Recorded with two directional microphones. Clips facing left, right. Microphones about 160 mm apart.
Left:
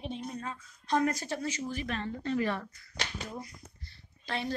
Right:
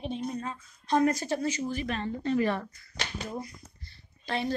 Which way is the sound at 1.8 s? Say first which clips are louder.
Right 3 dB; 20° right (ahead or behind).